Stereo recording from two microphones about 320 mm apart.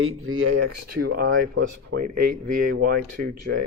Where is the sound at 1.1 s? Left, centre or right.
Right.